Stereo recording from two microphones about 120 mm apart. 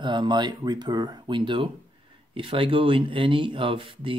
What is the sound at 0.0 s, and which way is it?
Speech, 40° right (ahead or behind).